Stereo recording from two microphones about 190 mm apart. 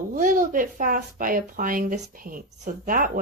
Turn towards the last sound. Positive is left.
turn(degrees=-45)  # may be behind; listen again after turning